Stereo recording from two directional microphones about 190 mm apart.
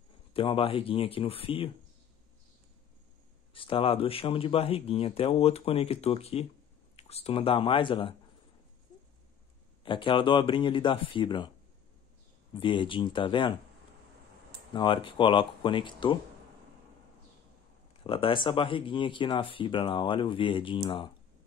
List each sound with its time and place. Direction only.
0.3 s speech: 30° left (ahead or behind)
3.5 s speech: 25° left (ahead or behind)
9.8 s speech: 25° left (ahead or behind)
12.5 s speech: 25° left (ahead or behind)
14.7 s speech: 25° left (ahead or behind)
18.0 s speech: 30° left (ahead or behind)